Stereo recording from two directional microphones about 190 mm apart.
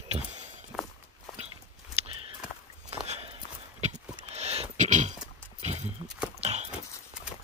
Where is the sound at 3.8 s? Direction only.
35° right (ahead or behind).